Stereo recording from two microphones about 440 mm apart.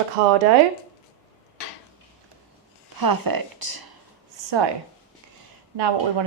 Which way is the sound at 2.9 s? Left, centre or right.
Right.